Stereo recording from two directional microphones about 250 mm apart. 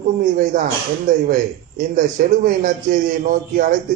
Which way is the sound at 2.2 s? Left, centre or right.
Right.